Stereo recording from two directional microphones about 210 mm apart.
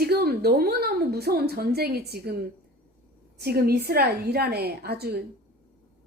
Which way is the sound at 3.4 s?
50° right (ahead or behind).